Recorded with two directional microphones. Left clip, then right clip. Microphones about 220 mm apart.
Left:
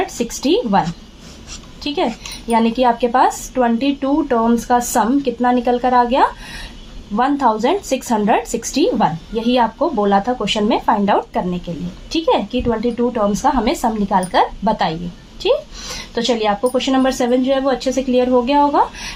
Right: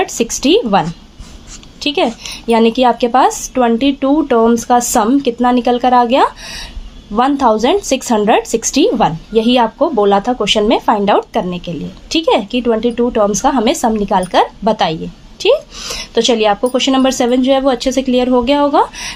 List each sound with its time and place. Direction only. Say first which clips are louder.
0.0 s a woman's voice: right 5 dB; 45° right (ahead or behind)